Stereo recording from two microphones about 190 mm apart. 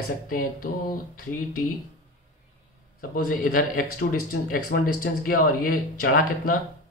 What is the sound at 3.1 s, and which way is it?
Speech, 45° left (ahead or behind).